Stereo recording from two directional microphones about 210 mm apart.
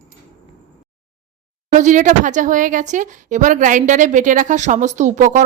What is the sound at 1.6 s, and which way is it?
Speech, 35° right (ahead or behind).